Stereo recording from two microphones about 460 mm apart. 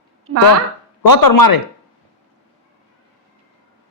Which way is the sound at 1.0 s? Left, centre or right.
Left.